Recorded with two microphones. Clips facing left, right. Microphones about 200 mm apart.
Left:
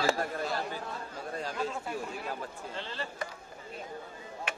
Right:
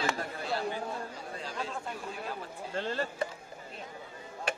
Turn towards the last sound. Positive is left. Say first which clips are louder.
# right 6 dB
turn(degrees=-45)  # may be behind; listen again after turning